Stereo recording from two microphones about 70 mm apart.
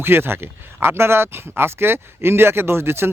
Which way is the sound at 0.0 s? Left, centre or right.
Right.